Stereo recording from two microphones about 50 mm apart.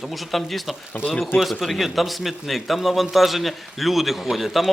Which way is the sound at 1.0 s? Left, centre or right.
Left.